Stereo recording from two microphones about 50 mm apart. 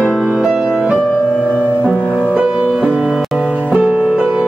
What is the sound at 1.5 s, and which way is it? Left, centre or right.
Music, left.